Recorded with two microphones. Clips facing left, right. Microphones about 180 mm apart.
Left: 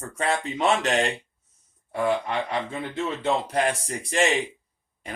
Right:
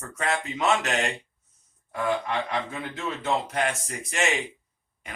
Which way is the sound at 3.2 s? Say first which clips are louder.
Left 2 dB; 35° left (ahead or behind).